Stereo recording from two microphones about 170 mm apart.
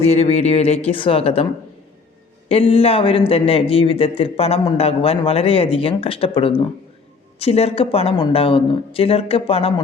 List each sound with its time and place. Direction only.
0.0 s speech: 40° left (ahead or behind)
2.5 s speech: 35° left (ahead or behind)